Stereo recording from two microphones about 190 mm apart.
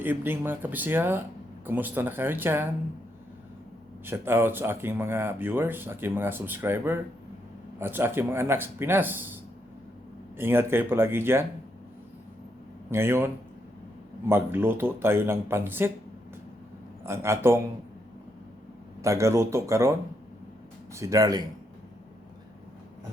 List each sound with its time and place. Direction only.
0.0 s speech: 10° right (ahead or behind)
4.0 s speech: 10° right (ahead or behind)
12.9 s speech: 15° right (ahead or behind)
17.1 s speech: 15° right (ahead or behind)
19.0 s speech: 15° right (ahead or behind)
20.9 s speech: 15° right (ahead or behind)